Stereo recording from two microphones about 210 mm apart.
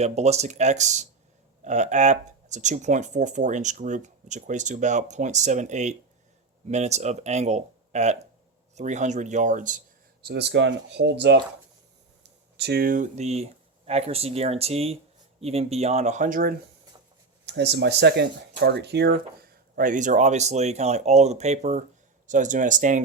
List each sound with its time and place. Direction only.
0.0 s speech: 30° right (ahead or behind)
17.4 s speech: 55° right (ahead or behind); by 23.0 s 35° right (ahead or behind)